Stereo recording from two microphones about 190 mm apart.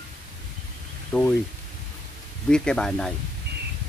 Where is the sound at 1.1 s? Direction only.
5° left (ahead or behind).